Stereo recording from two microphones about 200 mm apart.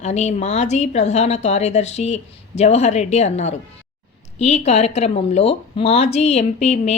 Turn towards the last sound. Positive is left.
turn(degrees=35)  # may be behind; listen again after turning